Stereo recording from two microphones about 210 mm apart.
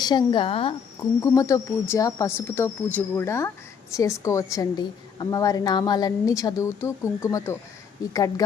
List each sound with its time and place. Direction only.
0.0 s speech: 20° left (ahead or behind)
1.2 s a woman's voice: 15° left (ahead or behind)